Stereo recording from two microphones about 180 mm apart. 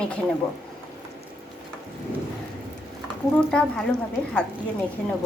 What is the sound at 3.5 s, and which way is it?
Speech, 5° left (ahead or behind).